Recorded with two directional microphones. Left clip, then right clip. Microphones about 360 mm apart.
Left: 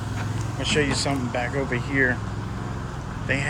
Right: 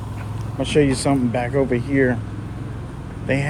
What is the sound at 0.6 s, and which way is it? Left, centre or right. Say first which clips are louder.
Speech: right 5 dB; centre.